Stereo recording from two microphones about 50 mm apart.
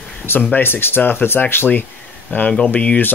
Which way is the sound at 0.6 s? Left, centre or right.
Left.